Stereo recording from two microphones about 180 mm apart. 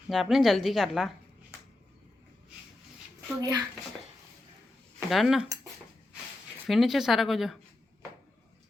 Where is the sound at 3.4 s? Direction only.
20° right (ahead or behind).